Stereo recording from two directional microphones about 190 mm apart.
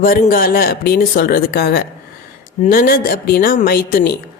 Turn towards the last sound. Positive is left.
turn(degrees=50)  # may be behind; listen again after turning